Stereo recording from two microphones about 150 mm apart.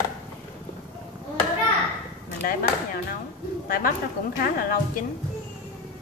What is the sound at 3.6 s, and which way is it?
Speech, 70° left (ahead or behind).